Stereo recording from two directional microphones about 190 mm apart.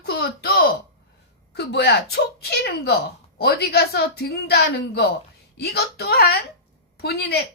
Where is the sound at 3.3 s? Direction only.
55° left (ahead or behind).